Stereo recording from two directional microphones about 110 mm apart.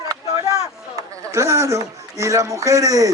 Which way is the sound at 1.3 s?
25° right (ahead or behind).